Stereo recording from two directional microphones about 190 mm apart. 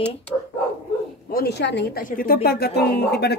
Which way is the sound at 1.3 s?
60° left (ahead or behind).